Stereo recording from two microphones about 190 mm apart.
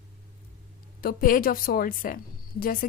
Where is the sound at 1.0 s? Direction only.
50° left (ahead or behind).